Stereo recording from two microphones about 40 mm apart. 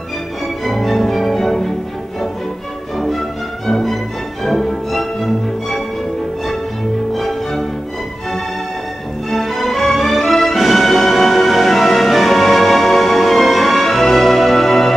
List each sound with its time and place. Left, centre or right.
0.7 s music: centre
3.0 s music: centre
7.2 s music: centre
9.3 s music: centre